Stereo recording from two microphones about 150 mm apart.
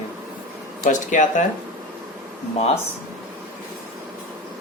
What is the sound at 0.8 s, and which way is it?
Speech, 55° left (ahead or behind).